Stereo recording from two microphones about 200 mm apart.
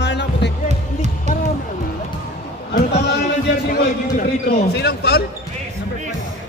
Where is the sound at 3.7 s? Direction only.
50° left (ahead or behind).